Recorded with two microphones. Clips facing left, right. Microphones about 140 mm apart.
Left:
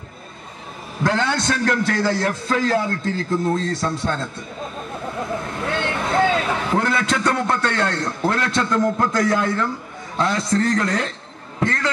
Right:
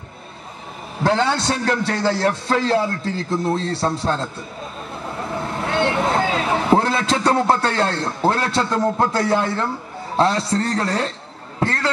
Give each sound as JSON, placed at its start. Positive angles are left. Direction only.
{"t": 1.0, "sound": "a man's voice", "side_deg": -30}
{"t": 5.8, "sound": "a man's voice", "side_deg": -30}